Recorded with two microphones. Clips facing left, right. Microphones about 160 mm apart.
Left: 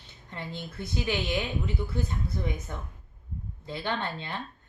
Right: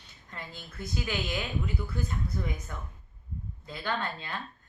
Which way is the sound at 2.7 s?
25° left (ahead or behind).